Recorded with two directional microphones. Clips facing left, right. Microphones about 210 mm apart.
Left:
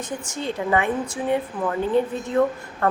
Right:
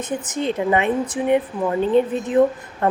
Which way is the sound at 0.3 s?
20° right (ahead or behind).